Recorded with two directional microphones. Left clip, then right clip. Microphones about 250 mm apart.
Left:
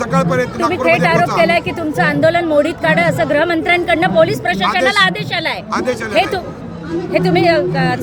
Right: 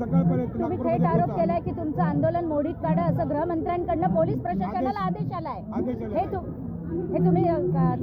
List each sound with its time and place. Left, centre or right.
0.3 s speech: left
7.1 s speech: left